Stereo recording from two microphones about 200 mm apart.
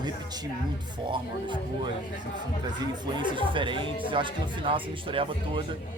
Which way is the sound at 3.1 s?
25° right (ahead or behind).